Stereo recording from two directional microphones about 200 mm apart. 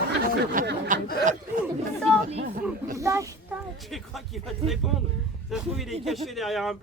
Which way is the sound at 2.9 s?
15° right (ahead or behind).